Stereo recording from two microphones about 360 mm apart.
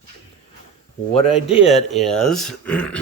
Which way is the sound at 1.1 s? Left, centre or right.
Centre.